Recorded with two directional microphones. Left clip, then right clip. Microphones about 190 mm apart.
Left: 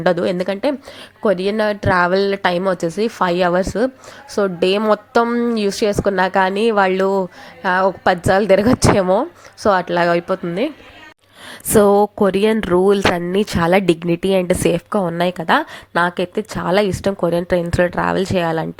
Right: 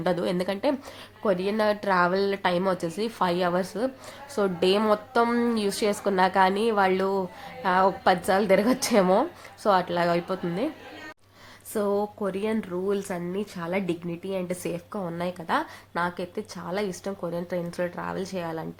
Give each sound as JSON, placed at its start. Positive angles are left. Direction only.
{"t": 0.0, "sound": "a woman's voice", "side_deg": 30}
{"t": 5.2, "sound": "a woman's voice", "side_deg": 20}
{"t": 11.7, "sound": "a woman's voice", "side_deg": 50}